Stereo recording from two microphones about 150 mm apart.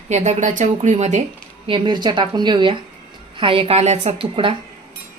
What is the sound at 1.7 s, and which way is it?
A woman's voice, 30° right (ahead or behind).